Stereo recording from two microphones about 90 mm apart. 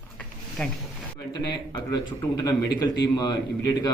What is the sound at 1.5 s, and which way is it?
A man's voice, 55° left (ahead or behind).